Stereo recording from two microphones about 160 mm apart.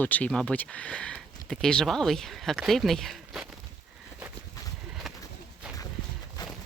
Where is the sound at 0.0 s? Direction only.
10° left (ahead or behind).